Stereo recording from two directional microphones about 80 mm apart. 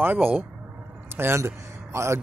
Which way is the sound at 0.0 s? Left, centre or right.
Right.